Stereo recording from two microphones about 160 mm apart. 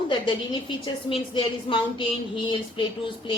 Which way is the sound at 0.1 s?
30° left (ahead or behind).